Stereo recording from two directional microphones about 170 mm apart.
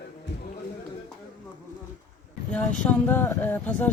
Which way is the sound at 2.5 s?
10° left (ahead or behind).